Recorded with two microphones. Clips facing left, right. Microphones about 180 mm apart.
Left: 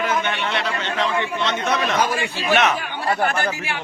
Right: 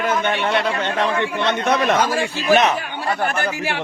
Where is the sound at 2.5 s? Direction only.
35° right (ahead or behind).